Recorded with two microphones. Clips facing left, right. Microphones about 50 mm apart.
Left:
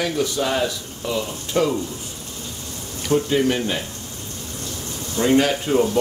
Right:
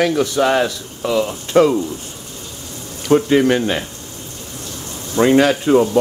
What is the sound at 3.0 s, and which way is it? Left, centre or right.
Speech, right.